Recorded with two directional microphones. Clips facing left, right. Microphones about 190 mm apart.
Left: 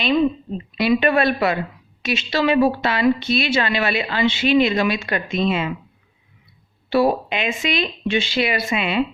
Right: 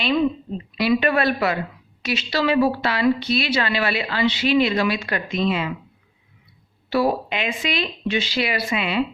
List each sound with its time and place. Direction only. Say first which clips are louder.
0.8 s a woman's voice: left 2 dB; 25° left (ahead or behind)
6.9 s a woman's voice: left 3 dB; 25° left (ahead or behind)